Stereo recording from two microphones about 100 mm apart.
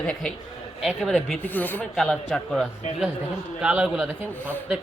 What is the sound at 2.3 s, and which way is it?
Speech, 5° left (ahead or behind).